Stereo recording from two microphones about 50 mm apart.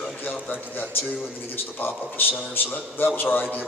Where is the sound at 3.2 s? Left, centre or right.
Left.